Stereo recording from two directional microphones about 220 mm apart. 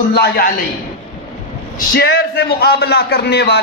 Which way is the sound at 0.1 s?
50° left (ahead or behind).